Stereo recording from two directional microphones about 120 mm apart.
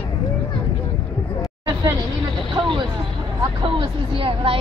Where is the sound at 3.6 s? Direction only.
45° right (ahead or behind).